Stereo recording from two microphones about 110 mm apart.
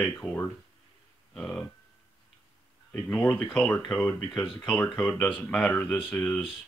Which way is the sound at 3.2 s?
10° left (ahead or behind).